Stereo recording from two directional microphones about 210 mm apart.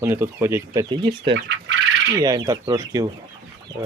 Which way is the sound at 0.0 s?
10° right (ahead or behind).